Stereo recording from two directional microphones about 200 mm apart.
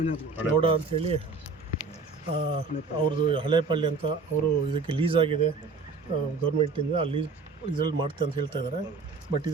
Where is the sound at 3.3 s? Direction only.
25° right (ahead or behind).